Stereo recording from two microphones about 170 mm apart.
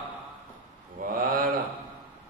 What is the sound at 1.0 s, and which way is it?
Speech, 55° right (ahead or behind).